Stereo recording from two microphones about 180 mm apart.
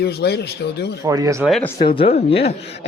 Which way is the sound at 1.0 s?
20° right (ahead or behind).